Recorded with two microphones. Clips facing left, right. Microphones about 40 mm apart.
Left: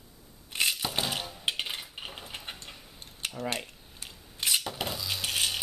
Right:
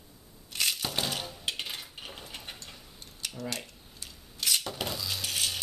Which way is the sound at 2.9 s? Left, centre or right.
Left.